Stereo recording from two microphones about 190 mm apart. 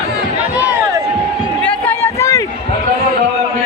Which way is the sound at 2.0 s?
15° left (ahead or behind).